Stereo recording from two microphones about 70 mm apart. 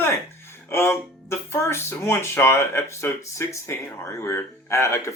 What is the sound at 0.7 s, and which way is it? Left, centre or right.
Speech, left.